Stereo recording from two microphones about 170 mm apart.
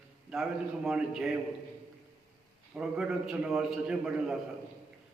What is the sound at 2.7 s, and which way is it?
A man's voice, 5° right (ahead or behind).